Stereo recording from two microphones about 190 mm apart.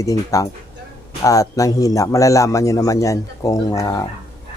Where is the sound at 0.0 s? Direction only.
15° left (ahead or behind).